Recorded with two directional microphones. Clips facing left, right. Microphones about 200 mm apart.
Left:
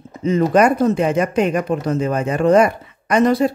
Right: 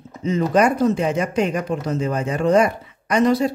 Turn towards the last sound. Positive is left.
turn(degrees=55)  # may be behind; listen again after turning